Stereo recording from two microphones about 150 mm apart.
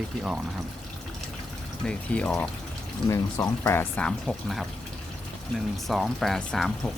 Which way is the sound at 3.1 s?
20° left (ahead or behind).